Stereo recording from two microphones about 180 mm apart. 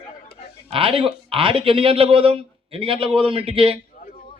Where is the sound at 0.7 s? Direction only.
30° right (ahead or behind).